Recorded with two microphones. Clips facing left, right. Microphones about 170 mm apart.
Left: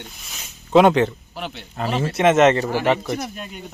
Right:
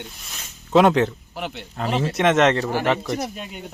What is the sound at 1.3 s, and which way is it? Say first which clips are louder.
Speech: right 1 dB; 15° right (ahead or behind).